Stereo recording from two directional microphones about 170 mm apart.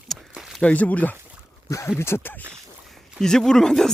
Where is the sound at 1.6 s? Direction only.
20° left (ahead or behind).